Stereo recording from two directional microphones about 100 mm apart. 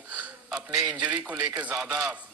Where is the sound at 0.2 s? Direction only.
10° right (ahead or behind).